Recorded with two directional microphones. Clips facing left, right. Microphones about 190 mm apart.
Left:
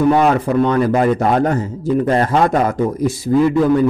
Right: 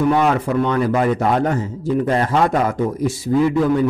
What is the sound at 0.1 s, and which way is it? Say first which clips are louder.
A man's voice: left 3 dB; 35° left (ahead or behind).